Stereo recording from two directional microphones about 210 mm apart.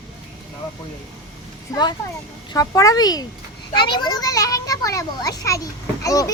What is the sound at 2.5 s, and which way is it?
A child's voice, 15° left (ahead or behind).